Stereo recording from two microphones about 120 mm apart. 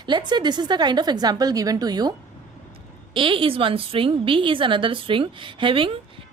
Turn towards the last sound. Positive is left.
turn(degrees=-45)  # may be behind; listen again after turning